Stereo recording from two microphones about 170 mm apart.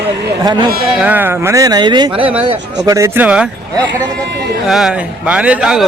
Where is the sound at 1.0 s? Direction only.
10° right (ahead or behind).